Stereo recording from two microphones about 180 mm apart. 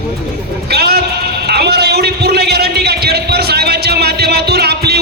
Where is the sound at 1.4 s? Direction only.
65° right (ahead or behind).